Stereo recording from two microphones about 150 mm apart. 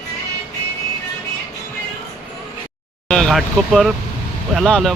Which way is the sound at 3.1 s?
Centre (ahead or behind).